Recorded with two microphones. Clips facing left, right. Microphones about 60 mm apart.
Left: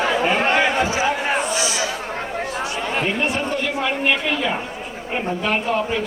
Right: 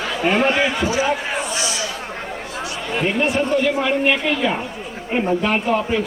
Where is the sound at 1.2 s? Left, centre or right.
Left.